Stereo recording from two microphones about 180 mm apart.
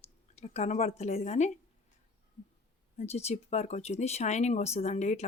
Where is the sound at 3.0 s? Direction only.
35° left (ahead or behind).